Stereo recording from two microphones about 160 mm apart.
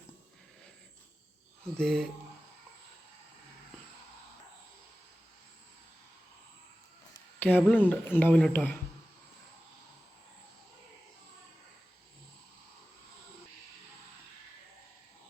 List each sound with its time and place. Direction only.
1.8 s speech: 5° left (ahead or behind)
7.3 s speech: 10° left (ahead or behind)